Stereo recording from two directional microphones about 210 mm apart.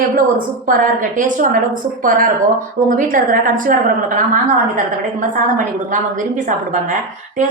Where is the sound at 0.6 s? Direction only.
40° right (ahead or behind).